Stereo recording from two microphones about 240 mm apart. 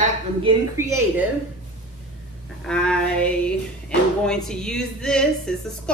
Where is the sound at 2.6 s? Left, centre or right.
Centre.